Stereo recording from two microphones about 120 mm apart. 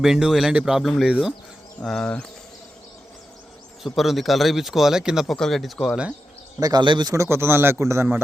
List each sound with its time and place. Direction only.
0.0 s speech: 5° right (ahead or behind)
3.8 s speech: centre (ahead or behind)
6.6 s speech: 35° right (ahead or behind)
7.1 s a man's voice: 20° right (ahead or behind)